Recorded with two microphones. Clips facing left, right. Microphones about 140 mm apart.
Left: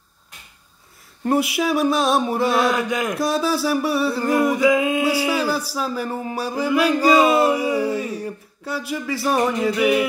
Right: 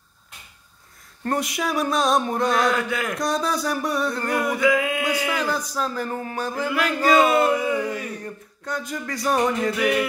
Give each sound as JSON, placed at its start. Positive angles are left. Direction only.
{"t": 1.2, "sound": "speech", "side_deg": 5}
{"t": 2.6, "sound": "music", "side_deg": 20}
{"t": 3.2, "sound": "speech", "side_deg": 5}
{"t": 4.3, "sound": "music", "side_deg": 25}
{"t": 5.1, "sound": "a sound", "side_deg": 30}
{"t": 5.8, "sound": "speech", "side_deg": 10}
{"t": 7.8, "sound": "a sound", "side_deg": 30}
{"t": 8.1, "sound": "speech", "side_deg": 10}